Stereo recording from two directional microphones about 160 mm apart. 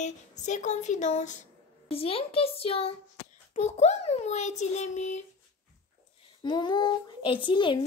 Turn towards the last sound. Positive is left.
turn(degrees=30)  # may be behind; listen again after turning